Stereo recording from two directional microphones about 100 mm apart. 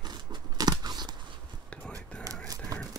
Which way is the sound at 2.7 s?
35° right (ahead or behind).